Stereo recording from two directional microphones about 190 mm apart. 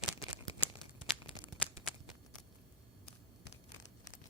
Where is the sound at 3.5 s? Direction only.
40° left (ahead or behind).